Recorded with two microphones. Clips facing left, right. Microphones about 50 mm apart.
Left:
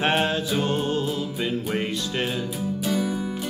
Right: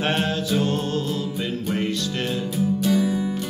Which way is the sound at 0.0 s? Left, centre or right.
Centre.